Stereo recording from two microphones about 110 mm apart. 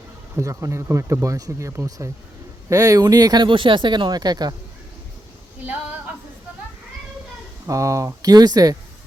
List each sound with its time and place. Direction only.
0.3 s speech: 25° right (ahead or behind)
7.7 s speech: 30° right (ahead or behind)